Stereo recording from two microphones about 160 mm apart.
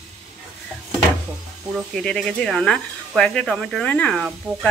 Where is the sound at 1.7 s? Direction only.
5° left (ahead or behind).